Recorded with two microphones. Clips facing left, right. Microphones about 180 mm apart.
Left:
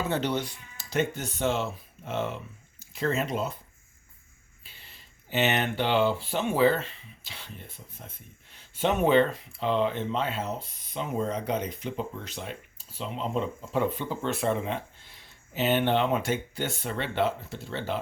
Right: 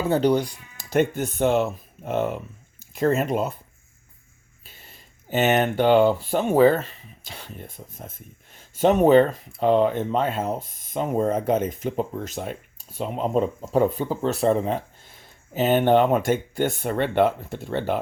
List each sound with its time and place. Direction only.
0.1 s speech: 40° right (ahead or behind)
0.8 s speech: 50° right (ahead or behind)
4.6 s speech: 45° right (ahead or behind)